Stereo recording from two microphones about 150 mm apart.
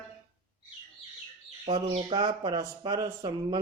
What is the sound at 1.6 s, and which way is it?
Speech, 30° right (ahead or behind).